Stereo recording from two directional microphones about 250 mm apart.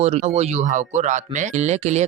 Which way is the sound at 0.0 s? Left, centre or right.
Right.